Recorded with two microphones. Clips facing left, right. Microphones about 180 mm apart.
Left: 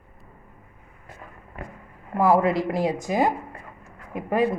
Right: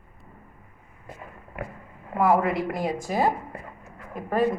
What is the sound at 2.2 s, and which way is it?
Speech, 30° left (ahead or behind).